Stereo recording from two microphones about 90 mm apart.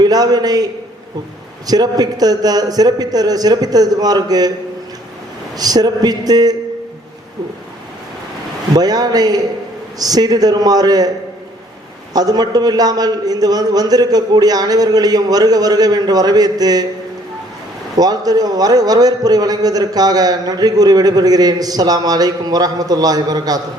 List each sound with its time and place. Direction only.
0.0 s a man's voice: 45° right (ahead or behind)
5.5 s a man's voice: 45° right (ahead or behind)
8.7 s a man's voice: 45° right (ahead or behind)
12.1 s a man's voice: 45° right (ahead or behind)
17.9 s a man's voice: 45° right (ahead or behind)